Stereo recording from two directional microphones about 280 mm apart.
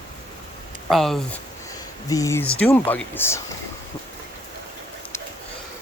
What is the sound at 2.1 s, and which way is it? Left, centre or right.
Speech, centre.